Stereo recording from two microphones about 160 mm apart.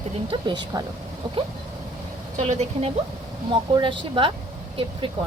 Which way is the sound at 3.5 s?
30° right (ahead or behind).